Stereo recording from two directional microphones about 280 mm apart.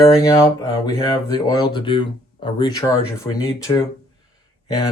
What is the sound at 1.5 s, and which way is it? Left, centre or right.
Speech, centre.